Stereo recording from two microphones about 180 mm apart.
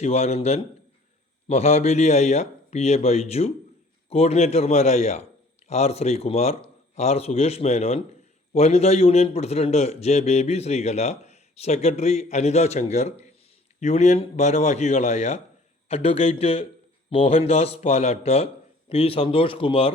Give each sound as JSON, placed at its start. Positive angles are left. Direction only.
{"t": 0.0, "sound": "a man's voice", "side_deg": 35}